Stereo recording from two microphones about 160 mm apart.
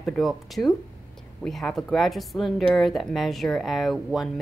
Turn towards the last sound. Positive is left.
turn(degrees=0)  # may be behind; listen again after turning